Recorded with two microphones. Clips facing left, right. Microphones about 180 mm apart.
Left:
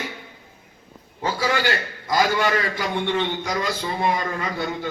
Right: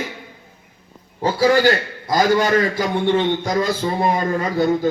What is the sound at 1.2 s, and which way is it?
A man's voice, 35° right (ahead or behind).